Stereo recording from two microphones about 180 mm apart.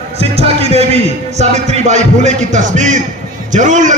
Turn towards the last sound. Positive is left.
turn(degrees=-45)  # may be behind; listen again after turning